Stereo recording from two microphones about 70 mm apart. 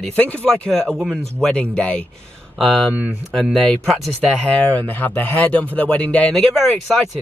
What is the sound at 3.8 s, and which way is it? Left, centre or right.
Speech, centre.